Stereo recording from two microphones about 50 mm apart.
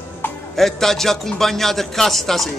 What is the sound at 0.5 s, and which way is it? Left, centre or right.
A man's voice, centre.